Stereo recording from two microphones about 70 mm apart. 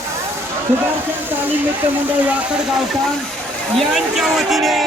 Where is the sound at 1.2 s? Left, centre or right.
Right.